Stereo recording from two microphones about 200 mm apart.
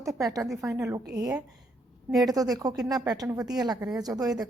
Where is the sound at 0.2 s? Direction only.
15° right (ahead or behind).